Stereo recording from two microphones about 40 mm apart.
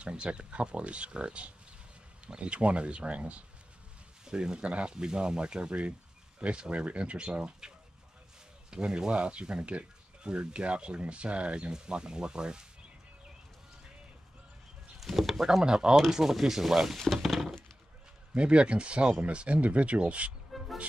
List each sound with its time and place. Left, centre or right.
0.0 s speech: right
4.2 s speech: centre
8.6 s speech: right
15.0 s speech: centre
17.0 s speech: centre
18.3 s speech: right